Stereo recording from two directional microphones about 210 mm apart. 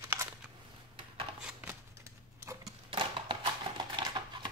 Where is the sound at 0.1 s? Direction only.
10° right (ahead or behind).